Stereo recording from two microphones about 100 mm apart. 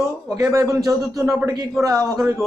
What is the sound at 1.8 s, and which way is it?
Speech, 35° right (ahead or behind).